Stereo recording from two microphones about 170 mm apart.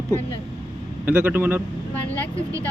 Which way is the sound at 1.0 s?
10° right (ahead or behind).